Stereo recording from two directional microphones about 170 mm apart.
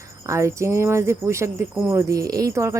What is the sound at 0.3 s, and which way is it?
Speech, 15° right (ahead or behind).